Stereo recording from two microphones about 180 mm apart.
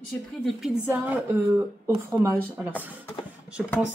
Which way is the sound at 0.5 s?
5° right (ahead or behind).